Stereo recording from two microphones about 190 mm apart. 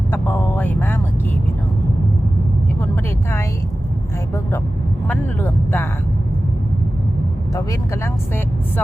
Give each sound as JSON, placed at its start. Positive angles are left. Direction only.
{"t": 0.1, "sound": "speech", "side_deg": 10}
{"t": 2.8, "sound": "speech", "side_deg": 15}
{"t": 5.0, "sound": "speech", "side_deg": 10}
{"t": 7.5, "sound": "speech", "side_deg": 20}